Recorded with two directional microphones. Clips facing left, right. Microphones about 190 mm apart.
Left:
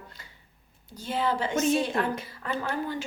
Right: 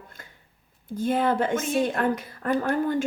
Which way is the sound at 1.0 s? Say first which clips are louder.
Right 5 dB; 50° right (ahead or behind).